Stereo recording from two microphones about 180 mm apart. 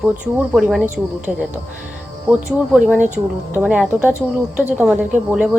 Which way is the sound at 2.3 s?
5° right (ahead or behind).